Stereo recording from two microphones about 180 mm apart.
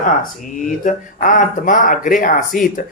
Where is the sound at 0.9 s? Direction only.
45° left (ahead or behind).